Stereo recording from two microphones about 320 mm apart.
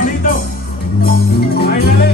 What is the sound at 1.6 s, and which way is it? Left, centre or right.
Music, left.